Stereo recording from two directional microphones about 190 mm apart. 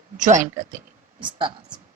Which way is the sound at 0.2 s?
40° right (ahead or behind).